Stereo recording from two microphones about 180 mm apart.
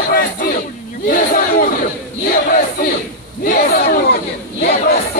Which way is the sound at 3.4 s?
50° left (ahead or behind).